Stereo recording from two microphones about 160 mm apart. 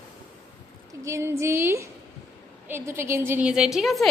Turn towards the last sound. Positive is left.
turn(degrees=0)  # may be behind; listen again after turning